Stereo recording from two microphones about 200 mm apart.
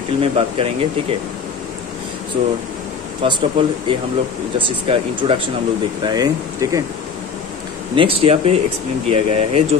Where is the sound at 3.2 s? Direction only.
25° right (ahead or behind).